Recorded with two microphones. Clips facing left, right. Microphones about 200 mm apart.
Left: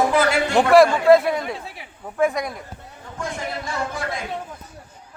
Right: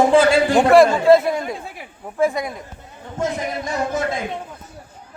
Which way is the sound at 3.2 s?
20° right (ahead or behind).